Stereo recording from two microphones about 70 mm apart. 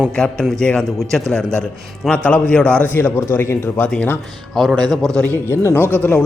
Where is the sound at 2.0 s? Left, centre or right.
Left.